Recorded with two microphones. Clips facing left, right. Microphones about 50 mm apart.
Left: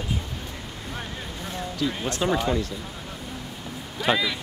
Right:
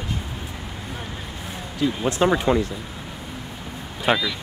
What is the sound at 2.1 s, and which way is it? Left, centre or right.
Speech, right.